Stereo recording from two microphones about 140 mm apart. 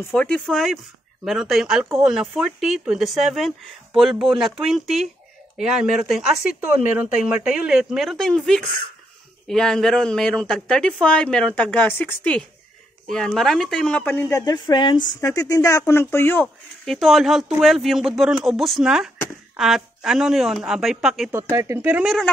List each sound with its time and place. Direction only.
0.1 s a woman's voice: 5° left (ahead or behind)
14.4 s speech: 30° left (ahead or behind)
15.1 s speech: 25° left (ahead or behind)
16.8 s a woman's voice: centre (ahead or behind)
21.3 s speech: 20° right (ahead or behind)
22.0 s a woman's voice: centre (ahead or behind)